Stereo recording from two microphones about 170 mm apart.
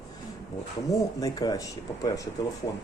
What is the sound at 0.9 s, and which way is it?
A man's voice, 20° left (ahead or behind).